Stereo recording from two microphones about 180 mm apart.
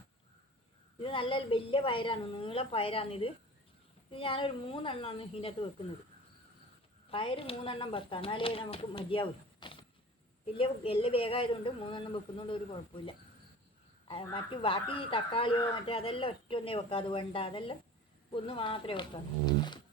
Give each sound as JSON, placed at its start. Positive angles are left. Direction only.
{"t": 1.0, "sound": "a woman's voice", "side_deg": 30}
{"t": 7.1, "sound": "speech", "side_deg": 30}
{"t": 14.3, "sound": "speech", "side_deg": 30}